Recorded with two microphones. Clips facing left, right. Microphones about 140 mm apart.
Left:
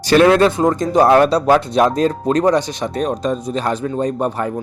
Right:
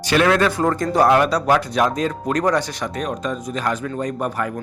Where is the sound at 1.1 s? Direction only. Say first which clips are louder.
Left 5 dB; 30° left (ahead or behind).